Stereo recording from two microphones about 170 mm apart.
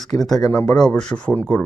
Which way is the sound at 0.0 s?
Centre (ahead or behind).